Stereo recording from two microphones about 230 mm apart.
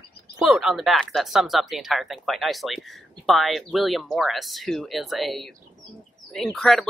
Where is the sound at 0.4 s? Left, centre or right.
Centre.